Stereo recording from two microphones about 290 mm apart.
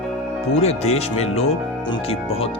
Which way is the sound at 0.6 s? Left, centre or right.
Left.